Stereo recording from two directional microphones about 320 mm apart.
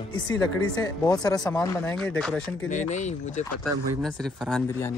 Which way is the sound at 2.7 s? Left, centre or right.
Left.